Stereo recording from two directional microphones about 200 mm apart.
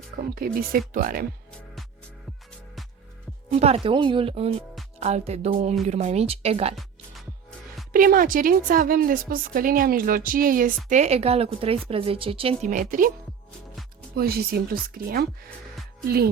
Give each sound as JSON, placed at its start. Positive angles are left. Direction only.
{"t": 0.2, "sound": "a woman's voice", "side_deg": -45}
{"t": 3.6, "sound": "speech", "side_deg": -30}
{"t": 7.9, "sound": "a woman's voice", "side_deg": -45}
{"t": 12.7, "sound": "a woman's voice", "side_deg": -40}
{"t": 14.2, "sound": "a woman's voice", "side_deg": -50}